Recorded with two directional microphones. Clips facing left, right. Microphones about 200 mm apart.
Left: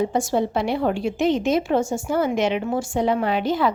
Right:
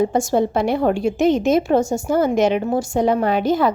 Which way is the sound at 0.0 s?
45° right (ahead or behind).